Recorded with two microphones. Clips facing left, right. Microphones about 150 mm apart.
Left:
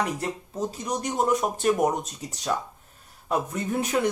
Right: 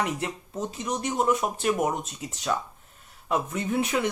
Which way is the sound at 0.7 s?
40° left (ahead or behind).